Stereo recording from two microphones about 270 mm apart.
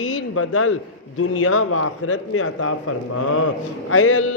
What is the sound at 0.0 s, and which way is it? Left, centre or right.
A man's voice, left.